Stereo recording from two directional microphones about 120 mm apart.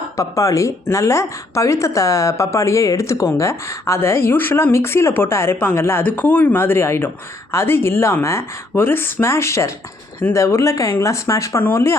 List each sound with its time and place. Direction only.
0.2 s speech: 25° left (ahead or behind)